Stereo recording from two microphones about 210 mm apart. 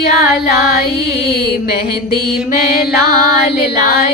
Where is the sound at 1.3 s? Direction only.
45° left (ahead or behind).